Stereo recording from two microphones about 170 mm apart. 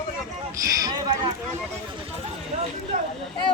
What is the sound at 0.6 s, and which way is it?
Speech, 20° right (ahead or behind).